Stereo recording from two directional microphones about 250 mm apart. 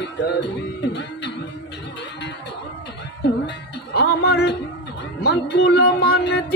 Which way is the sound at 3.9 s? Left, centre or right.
Left.